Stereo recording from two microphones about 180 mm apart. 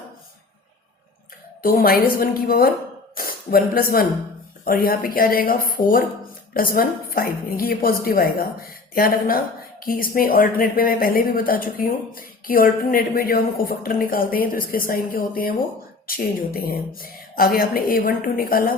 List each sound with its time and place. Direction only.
1.6 s a woman's voice: 55° left (ahead or behind)